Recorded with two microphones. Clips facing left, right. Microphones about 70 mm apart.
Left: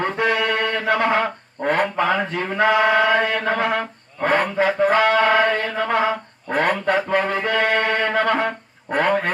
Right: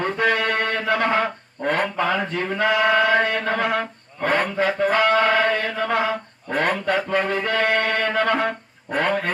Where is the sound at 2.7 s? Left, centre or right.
Centre.